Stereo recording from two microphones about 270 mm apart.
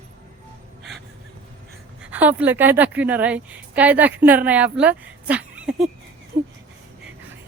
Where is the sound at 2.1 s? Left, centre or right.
Centre.